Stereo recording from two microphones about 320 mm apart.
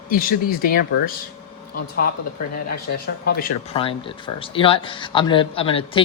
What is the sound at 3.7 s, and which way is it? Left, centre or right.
Speech, centre.